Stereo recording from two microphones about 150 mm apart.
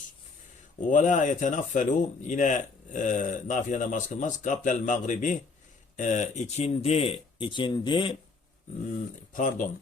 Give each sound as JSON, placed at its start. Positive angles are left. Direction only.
{"t": 0.9, "sound": "speech", "side_deg": 55}
{"t": 9.3, "sound": "speech", "side_deg": 60}